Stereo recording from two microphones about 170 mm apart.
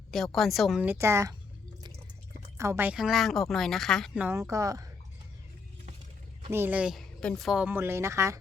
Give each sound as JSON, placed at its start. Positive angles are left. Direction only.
{"t": 0.1, "sound": "speech", "side_deg": 0}
{"t": 2.6, "sound": "speech", "side_deg": -15}
{"t": 4.2, "sound": "a woman's voice", "side_deg": -15}
{"t": 6.5, "sound": "a woman's voice", "side_deg": -10}